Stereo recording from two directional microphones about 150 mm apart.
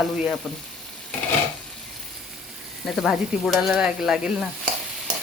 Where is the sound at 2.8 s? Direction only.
Centre (ahead or behind).